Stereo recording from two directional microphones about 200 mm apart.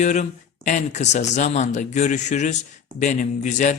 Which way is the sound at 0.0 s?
35° left (ahead or behind).